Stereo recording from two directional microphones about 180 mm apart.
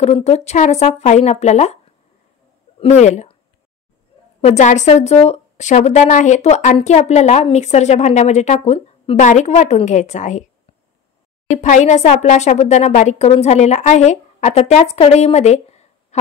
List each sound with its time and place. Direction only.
0.0 s a woman's voice: 35° left (ahead or behind)
2.8 s a woman's voice: 40° left (ahead or behind)
4.4 s a woman's voice: 40° left (ahead or behind)
11.5 s a woman's voice: 40° left (ahead or behind)